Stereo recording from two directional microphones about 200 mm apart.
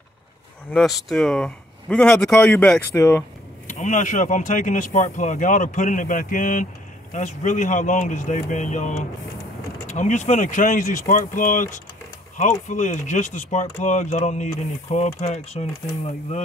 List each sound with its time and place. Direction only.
0.7 s speech: centre (ahead or behind)
3.6 s speech: 40° left (ahead or behind)